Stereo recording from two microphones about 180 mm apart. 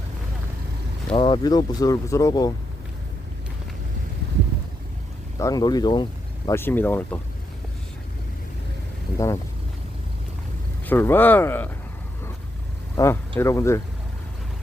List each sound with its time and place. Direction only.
1.1 s speech: 25° left (ahead or behind)
5.4 s speech: 20° left (ahead or behind)
6.6 s speech: 10° left (ahead or behind)
9.1 s speech: 15° left (ahead or behind)
10.8 s speech: 10° left (ahead or behind)
13.0 s speech: 20° left (ahead or behind)